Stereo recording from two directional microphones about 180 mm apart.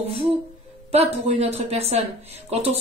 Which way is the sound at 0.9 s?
35° right (ahead or behind).